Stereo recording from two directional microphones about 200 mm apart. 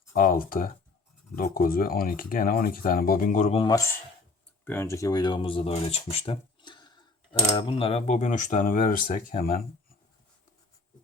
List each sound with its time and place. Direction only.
0.1 s speech: 45° left (ahead or behind)
3.6 s speech: 15° left (ahead or behind); by 9.6 s 45° left (ahead or behind)